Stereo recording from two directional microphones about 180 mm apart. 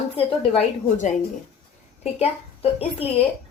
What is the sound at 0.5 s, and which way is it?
A woman's voice, 40° left (ahead or behind).